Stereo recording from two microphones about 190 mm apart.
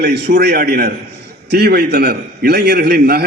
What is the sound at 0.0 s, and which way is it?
A man's voice, 60° right (ahead or behind).